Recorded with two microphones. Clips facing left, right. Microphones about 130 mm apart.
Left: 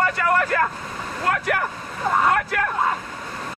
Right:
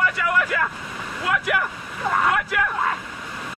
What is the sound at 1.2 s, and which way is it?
Speech, 45° left (ahead or behind).